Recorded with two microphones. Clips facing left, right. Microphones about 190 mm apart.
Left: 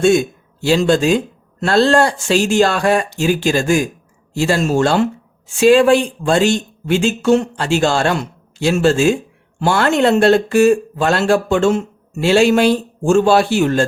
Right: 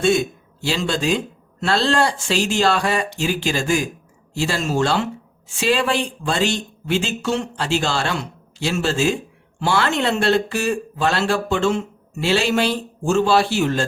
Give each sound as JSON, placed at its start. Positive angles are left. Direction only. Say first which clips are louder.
{"t": 0.0, "sound": "a man's voice", "louder": "left 5 dB", "side_deg": 45}